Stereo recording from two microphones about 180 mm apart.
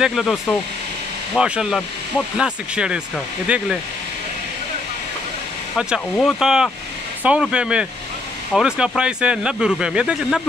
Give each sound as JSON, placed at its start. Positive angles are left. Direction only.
{"t": 0.0, "sound": "speech", "side_deg": 0}
{"t": 1.3, "sound": "speech", "side_deg": -5}
{"t": 5.8, "sound": "speech", "side_deg": -5}